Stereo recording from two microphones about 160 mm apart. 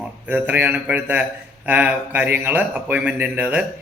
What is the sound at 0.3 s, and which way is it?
A man's voice, 10° right (ahead or behind).